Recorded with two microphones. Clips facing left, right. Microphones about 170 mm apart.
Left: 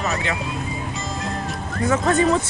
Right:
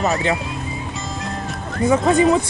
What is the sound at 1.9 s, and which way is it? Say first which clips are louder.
Speech: right 3 dB; 15° right (ahead or behind).